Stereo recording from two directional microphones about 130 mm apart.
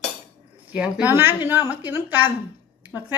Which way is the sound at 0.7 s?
10° right (ahead or behind).